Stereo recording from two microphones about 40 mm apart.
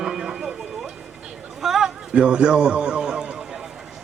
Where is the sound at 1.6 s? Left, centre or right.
Centre.